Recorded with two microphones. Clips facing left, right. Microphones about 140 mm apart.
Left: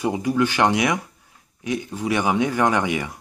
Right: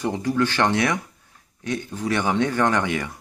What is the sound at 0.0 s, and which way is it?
Speech, 10° left (ahead or behind).